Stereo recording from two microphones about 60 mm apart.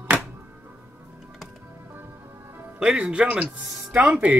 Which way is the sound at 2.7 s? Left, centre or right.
Centre.